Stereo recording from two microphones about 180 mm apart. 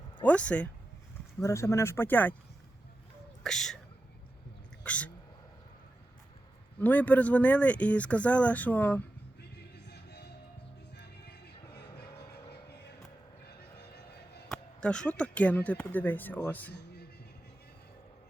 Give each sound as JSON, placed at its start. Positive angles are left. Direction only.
{"t": 0.2, "sound": "speech", "side_deg": 5}
{"t": 3.4, "sound": "a sound", "side_deg": 0}
{"t": 4.8, "sound": "a sound", "side_deg": 5}
{"t": 6.7, "sound": "speech", "side_deg": 10}
{"t": 9.4, "sound": "music", "side_deg": 65}
{"t": 11.6, "sound": "music", "side_deg": 20}
{"t": 12.5, "sound": "music", "side_deg": 65}
{"t": 14.5, "sound": "speech", "side_deg": 5}
{"t": 16.7, "sound": "a sound", "side_deg": 65}